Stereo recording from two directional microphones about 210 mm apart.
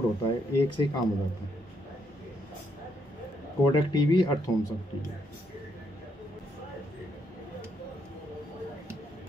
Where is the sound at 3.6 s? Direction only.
20° left (ahead or behind).